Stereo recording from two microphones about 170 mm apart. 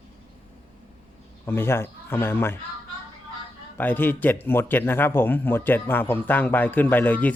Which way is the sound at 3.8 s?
10° left (ahead or behind).